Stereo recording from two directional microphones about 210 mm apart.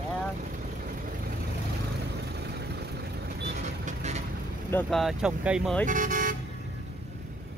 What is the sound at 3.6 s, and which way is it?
Vehicle, 35° right (ahead or behind).